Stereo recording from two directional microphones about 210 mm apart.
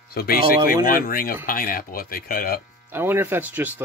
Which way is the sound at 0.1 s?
45° left (ahead or behind).